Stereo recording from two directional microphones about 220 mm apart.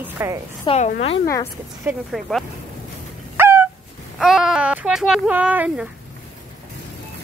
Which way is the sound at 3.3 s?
10° right (ahead or behind).